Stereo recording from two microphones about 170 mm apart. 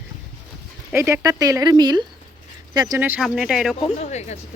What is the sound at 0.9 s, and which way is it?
Speech, 15° right (ahead or behind).